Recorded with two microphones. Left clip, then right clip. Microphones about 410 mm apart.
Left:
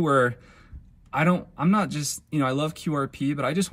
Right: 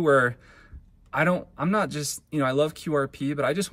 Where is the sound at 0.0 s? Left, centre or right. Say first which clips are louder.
Right 1 dB; centre.